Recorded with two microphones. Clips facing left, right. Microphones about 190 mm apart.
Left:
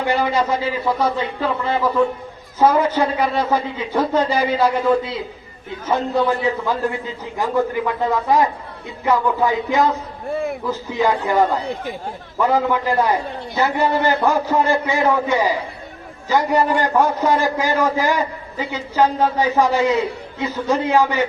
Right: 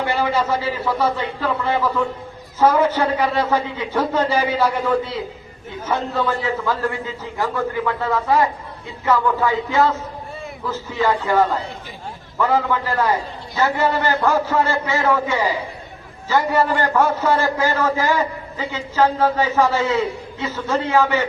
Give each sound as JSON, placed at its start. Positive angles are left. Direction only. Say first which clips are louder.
{"t": 0.1, "sound": "a man's voice", "louder": "left 3 dB", "side_deg": 15}
{"t": 2.6, "sound": "a man's voice", "louder": "even", "side_deg": 10}